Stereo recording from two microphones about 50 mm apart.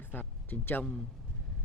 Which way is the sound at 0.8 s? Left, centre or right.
Centre.